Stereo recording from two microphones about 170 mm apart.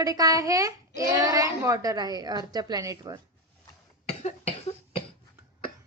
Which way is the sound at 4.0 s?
40° left (ahead or behind).